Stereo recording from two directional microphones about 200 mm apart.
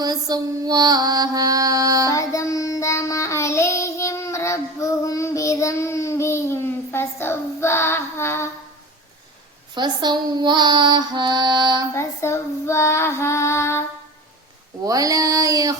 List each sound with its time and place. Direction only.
0.0 s music: 20° right (ahead or behind)
2.0 s child singing: 15° left (ahead or behind)
9.7 s music: 20° right (ahead or behind)
11.9 s female singing: 15° left (ahead or behind)
14.8 s a sound: 15° right (ahead or behind)